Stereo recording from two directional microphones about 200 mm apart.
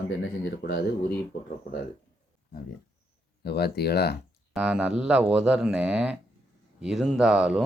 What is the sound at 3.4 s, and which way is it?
Speech, 55° left (ahead or behind).